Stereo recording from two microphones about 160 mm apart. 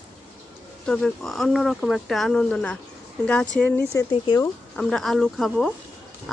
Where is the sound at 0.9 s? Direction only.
5° left (ahead or behind).